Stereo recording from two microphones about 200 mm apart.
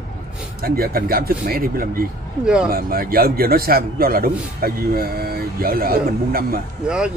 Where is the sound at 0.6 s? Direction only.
50° right (ahead or behind).